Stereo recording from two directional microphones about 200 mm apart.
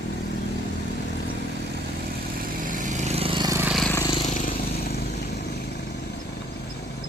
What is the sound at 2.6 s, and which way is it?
Vehicle, 40° right (ahead or behind).